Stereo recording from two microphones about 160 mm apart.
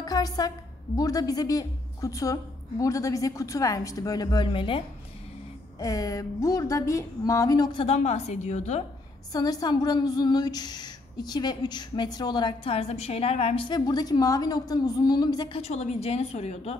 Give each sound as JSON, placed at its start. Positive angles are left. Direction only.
{"t": 0.0, "sound": "a woman's voice", "side_deg": 25}
{"t": 5.8, "sound": "a woman's voice", "side_deg": 20}
{"t": 7.8, "sound": "a woman's voice", "side_deg": 40}
{"t": 9.3, "sound": "a woman's voice", "side_deg": 25}
{"t": 13.7, "sound": "a woman's voice", "side_deg": 25}